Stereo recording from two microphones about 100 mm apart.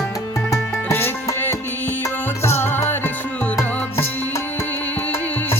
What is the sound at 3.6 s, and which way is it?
Music, 30° left (ahead or behind).